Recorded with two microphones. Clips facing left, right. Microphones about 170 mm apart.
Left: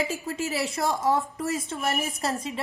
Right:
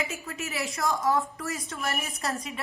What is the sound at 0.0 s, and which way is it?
A woman's voice, 30° left (ahead or behind).